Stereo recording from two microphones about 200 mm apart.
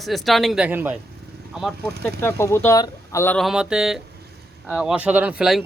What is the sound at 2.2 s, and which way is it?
A man's voice, 10° left (ahead or behind).